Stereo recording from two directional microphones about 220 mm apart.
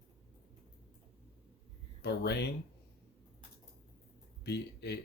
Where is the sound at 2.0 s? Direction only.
50° left (ahead or behind).